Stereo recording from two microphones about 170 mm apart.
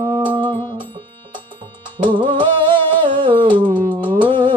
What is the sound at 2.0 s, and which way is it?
Music, 30° right (ahead or behind).